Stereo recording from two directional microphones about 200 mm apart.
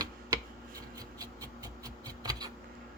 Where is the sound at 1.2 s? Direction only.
20° right (ahead or behind).